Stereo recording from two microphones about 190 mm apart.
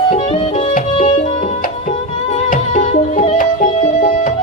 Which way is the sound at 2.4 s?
45° left (ahead or behind).